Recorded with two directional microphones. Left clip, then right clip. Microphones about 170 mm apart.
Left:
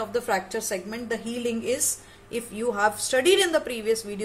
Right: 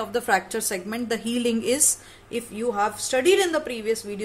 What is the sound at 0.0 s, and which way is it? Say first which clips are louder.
A woman's voice: right 3 dB; 20° right (ahead or behind).